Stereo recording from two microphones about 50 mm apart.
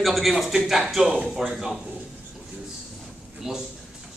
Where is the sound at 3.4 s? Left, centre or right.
Centre.